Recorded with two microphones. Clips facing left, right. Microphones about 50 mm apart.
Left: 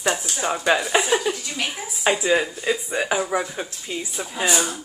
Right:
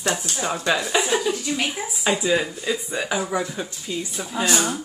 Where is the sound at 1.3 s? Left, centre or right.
Centre.